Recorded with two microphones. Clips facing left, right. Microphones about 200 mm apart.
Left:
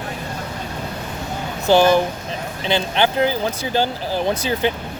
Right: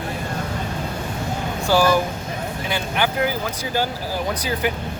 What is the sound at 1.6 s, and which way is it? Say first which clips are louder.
Speech: left 4 dB; 20° left (ahead or behind).